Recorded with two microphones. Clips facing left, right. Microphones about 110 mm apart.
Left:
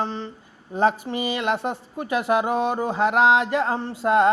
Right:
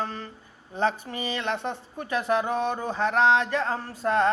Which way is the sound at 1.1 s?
35° left (ahead or behind).